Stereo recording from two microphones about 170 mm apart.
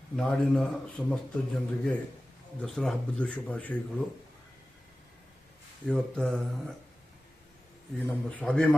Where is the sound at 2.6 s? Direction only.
Centre (ahead or behind).